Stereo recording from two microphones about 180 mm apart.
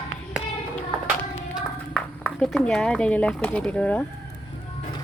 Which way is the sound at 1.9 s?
5° left (ahead or behind).